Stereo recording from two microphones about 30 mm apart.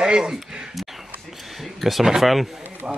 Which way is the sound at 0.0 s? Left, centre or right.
Right.